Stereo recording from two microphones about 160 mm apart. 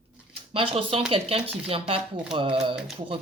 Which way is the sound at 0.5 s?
35° right (ahead or behind).